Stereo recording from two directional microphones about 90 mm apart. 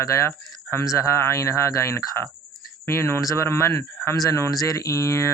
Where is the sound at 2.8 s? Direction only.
30° left (ahead or behind).